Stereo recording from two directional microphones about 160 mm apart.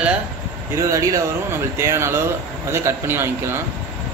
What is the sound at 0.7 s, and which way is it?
A man's voice, 20° right (ahead or behind).